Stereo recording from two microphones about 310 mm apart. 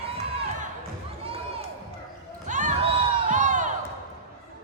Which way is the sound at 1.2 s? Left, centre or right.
Centre.